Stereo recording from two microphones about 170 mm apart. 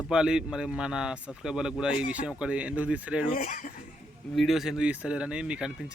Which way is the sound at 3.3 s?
50° left (ahead or behind).